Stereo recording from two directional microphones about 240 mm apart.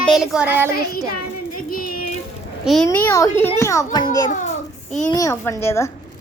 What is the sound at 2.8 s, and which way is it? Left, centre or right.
A child's voice, centre.